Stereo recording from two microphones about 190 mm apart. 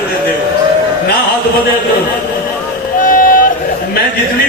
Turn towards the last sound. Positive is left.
turn(degrees=45)  # may be behind; listen again after turning